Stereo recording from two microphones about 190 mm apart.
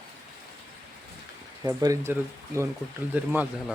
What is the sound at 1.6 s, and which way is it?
Speech, 20° right (ahead or behind).